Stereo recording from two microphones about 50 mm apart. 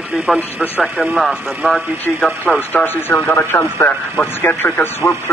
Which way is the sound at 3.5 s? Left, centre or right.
Left.